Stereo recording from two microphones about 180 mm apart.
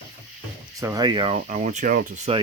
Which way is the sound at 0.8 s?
20° right (ahead or behind).